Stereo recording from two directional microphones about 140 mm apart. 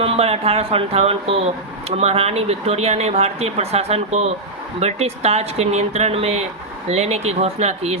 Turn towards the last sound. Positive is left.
turn(degrees=-50)  # may be behind; listen again after turning